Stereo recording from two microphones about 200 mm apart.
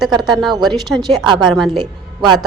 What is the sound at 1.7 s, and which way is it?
Speech, 20° right (ahead or behind).